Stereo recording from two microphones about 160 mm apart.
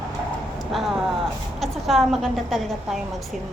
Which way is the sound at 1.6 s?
Centre (ahead or behind).